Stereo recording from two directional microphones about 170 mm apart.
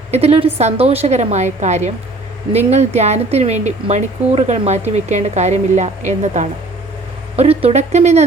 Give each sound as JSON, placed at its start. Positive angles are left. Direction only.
{"t": 0.1, "sound": "speech", "side_deg": -35}